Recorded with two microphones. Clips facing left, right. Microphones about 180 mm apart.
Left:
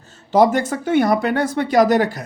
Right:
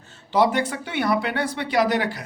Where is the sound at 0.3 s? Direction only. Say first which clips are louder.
Left 5 dB; 45° left (ahead or behind).